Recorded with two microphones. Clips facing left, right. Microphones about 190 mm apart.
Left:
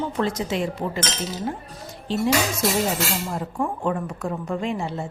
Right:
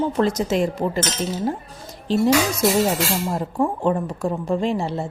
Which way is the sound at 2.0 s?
40° right (ahead or behind).